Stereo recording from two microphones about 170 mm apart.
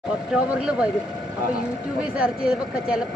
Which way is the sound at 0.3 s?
5° right (ahead or behind).